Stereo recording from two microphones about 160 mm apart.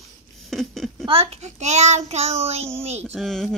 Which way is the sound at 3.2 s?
Centre (ahead or behind).